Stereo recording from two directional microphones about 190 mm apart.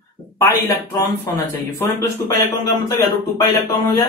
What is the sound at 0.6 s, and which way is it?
Speech, 15° left (ahead or behind).